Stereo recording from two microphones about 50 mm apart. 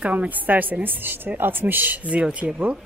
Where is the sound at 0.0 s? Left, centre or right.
Right.